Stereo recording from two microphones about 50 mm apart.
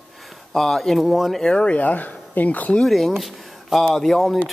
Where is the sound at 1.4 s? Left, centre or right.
Centre.